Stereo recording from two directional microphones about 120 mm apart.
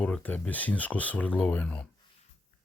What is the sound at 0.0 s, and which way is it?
Speech, 10° left (ahead or behind).